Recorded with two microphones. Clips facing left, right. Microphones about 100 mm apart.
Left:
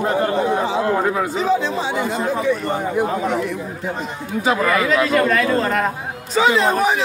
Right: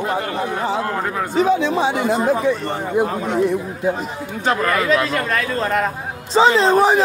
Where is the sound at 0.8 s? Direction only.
15° left (ahead or behind).